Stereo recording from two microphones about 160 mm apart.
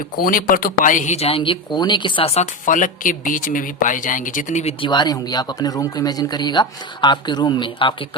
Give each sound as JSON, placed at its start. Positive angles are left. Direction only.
{"t": 0.2, "sound": "speech", "side_deg": 65}
{"t": 4.8, "sound": "speech", "side_deg": 30}